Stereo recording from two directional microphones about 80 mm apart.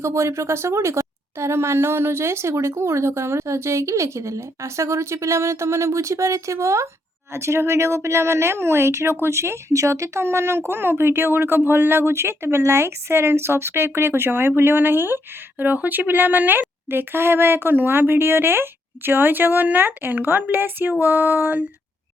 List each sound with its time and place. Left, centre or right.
0.0 s speech: right